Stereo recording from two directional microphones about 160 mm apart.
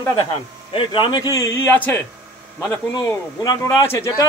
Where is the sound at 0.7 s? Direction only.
30° left (ahead or behind).